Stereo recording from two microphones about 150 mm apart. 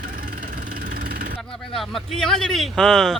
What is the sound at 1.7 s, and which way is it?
Speech, centre (ahead or behind).